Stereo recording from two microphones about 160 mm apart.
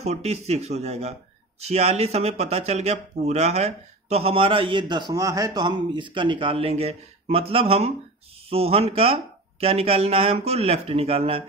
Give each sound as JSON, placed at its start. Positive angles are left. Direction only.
{"t": 0.0, "sound": "speech", "side_deg": -45}